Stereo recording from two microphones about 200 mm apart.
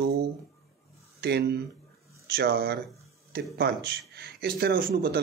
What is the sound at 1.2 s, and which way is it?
Speech, 55° right (ahead or behind).